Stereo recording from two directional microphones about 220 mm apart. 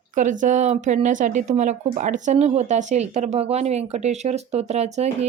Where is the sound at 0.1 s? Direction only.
35° right (ahead or behind).